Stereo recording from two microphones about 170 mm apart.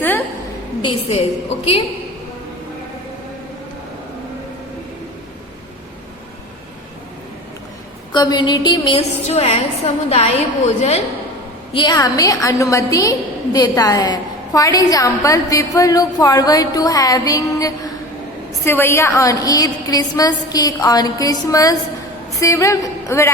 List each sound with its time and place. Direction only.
0.8 s a woman's voice: 30° left (ahead or behind)
8.1 s a woman's voice: 25° left (ahead or behind); by 11.0 s 40° left (ahead or behind)
11.7 s a woman's voice: 25° left (ahead or behind)